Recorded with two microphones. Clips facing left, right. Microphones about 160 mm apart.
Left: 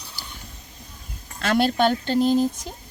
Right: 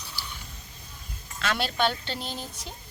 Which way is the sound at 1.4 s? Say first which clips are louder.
Left 7 dB; 45° left (ahead or behind).